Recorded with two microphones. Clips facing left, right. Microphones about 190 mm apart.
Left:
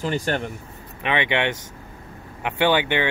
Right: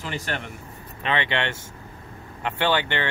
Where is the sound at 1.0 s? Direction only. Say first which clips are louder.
Left 3 dB; 15° left (ahead or behind).